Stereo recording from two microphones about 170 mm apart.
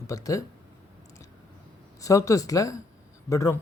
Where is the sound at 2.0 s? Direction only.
20° left (ahead or behind).